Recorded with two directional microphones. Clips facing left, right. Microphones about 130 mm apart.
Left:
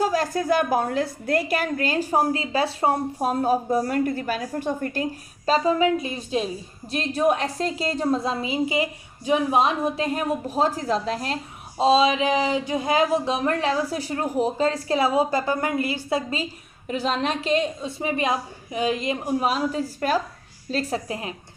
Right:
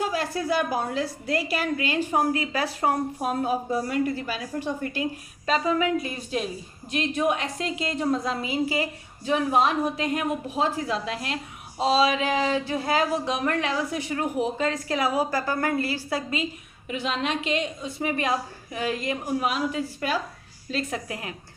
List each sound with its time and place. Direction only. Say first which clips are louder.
0.0 s a woman's voice: left 4 dB; 40° left (ahead or behind)
5.5 s speech: left 4 dB; 30° left (ahead or behind)
6.9 s a woman's voice: left 3 dB; 35° left (ahead or behind)
11.8 s a woman's voice: left 3 dB; 25° left (ahead or behind)